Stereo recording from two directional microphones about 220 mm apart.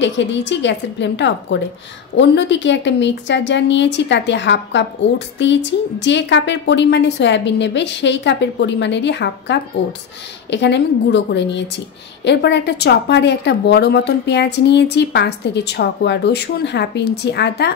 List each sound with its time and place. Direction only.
0.0 s a woman's voice: 55° left (ahead or behind)